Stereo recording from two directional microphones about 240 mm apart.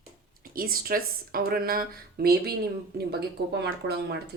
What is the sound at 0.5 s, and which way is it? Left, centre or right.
Speech, right.